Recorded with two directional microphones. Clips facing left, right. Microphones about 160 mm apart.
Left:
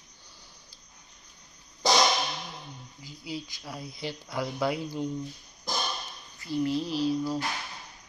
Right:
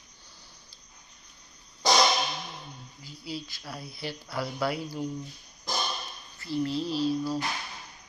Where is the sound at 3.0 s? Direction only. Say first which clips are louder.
Even; 15° left (ahead or behind).